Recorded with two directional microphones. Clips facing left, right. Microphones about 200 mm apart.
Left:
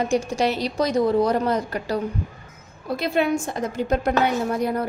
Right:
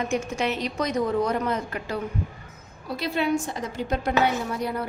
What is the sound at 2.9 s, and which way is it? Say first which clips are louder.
A woman's voice: left 3 dB; 50° left (ahead or behind).